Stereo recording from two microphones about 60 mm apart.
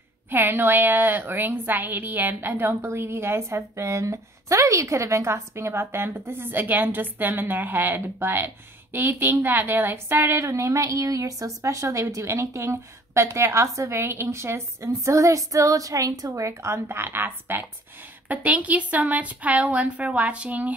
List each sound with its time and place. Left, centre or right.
0.3 s a woman's voice: right
10.4 s a woman's voice: right
18.3 s speech: right